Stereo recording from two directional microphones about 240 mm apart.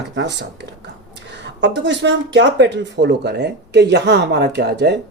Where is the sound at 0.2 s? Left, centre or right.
Right.